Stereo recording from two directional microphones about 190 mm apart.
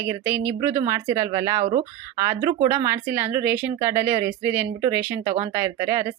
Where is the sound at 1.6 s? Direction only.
35° right (ahead or behind).